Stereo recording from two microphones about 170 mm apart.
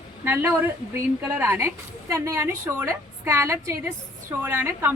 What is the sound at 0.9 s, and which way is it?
A woman's voice, 15° right (ahead or behind).